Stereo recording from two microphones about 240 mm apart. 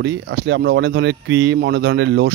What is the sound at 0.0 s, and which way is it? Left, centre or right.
Speech, right.